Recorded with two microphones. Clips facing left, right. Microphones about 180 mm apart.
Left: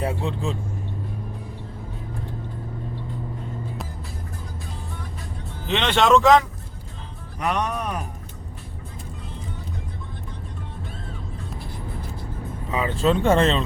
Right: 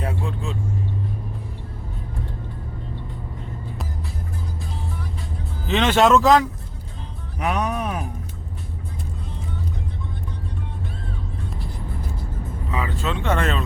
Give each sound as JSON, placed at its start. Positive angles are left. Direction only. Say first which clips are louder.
{"t": 0.0, "sound": "vehicle", "louder": "left 2 dB", "side_deg": 30}
{"t": 5.6, "sound": "speech", "louder": "right 3 dB", "side_deg": -5}
{"t": 7.3, "sound": "music", "louder": "right 1 dB", "side_deg": -5}
{"t": 13.0, "sound": "speech", "louder": "left 7 dB", "side_deg": 35}